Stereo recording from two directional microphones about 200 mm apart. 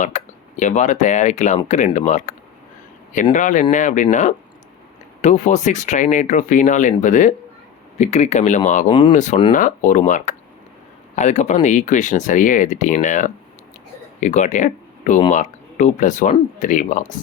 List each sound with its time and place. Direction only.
0.0 s speech: 35° left (ahead or behind)
3.3 s speech: 40° left (ahead or behind)
8.9 s speech: 25° left (ahead or behind)
9.1 s speech: 35° left (ahead or behind)